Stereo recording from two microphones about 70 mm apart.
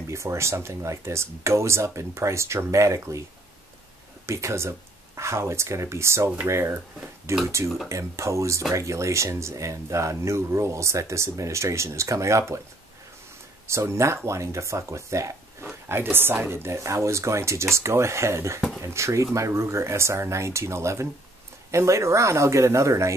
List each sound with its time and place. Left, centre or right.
0.0 s speech: right
4.3 s speech: right
13.7 s speech: right
15.6 s speech: right